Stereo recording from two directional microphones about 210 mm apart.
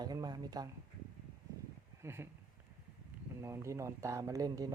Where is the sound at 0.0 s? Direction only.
20° right (ahead or behind).